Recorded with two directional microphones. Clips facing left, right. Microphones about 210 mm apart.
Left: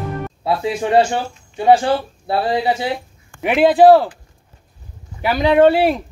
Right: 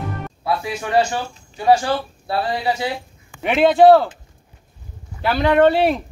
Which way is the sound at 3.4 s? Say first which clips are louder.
Left 1 dB; 5° left (ahead or behind).